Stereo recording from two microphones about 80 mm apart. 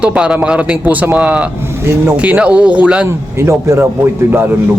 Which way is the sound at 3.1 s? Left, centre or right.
Right.